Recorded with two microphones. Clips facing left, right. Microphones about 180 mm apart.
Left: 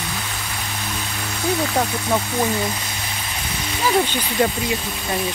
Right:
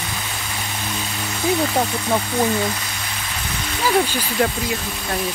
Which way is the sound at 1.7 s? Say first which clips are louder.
Even; 5° right (ahead or behind).